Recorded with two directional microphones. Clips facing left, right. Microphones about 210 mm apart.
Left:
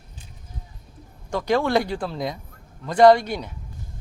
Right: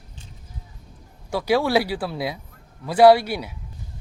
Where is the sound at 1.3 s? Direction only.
10° right (ahead or behind).